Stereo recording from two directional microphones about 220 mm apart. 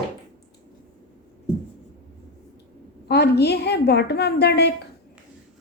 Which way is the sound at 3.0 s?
45° left (ahead or behind).